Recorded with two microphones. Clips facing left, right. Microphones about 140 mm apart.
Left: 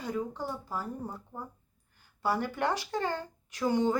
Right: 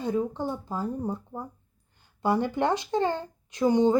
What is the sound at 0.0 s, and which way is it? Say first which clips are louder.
Speech: right 6 dB; 25° right (ahead or behind).